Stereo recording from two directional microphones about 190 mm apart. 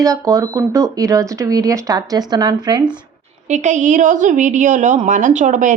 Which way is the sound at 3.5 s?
40° right (ahead or behind).